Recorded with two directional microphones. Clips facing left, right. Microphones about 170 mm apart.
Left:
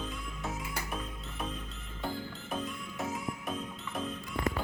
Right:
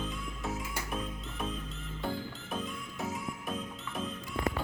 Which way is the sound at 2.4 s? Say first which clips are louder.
Left 3 dB; centre (ahead or behind).